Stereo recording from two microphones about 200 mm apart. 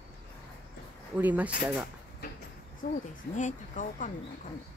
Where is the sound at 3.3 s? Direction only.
40° left (ahead or behind).